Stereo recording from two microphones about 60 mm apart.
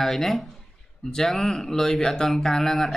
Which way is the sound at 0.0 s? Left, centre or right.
Centre.